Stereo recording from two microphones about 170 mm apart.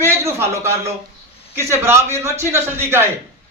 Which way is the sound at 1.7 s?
15° right (ahead or behind).